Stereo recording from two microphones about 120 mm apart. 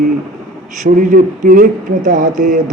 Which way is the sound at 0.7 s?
90° right.